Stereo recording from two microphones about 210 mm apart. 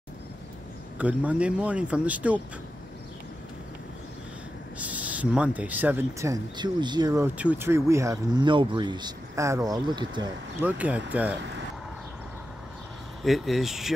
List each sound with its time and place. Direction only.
0.9 s speech: 5° right (ahead or behind)
4.7 s speech: 5° right (ahead or behind)
7.3 s speech: 10° right (ahead or behind)
10.6 s speech: 5° right (ahead or behind)
13.2 s speech: centre (ahead or behind)